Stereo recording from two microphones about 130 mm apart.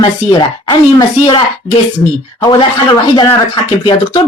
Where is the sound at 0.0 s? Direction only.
35° left (ahead or behind).